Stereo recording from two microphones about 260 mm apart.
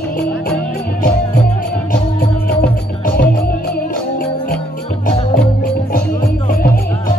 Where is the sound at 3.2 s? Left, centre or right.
Left.